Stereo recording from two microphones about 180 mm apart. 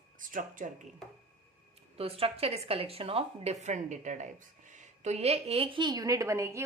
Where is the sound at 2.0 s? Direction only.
30° right (ahead or behind); by 6.7 s 15° right (ahead or behind).